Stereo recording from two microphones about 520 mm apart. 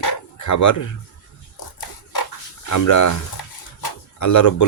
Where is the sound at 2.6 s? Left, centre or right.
Left.